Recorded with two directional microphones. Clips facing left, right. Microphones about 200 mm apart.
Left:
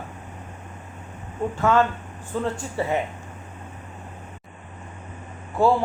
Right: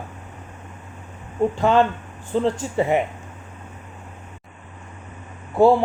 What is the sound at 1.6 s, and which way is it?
Speech, 30° right (ahead or behind).